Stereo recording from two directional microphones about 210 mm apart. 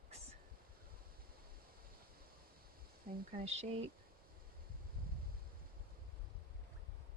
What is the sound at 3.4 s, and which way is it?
Speech, 30° right (ahead or behind).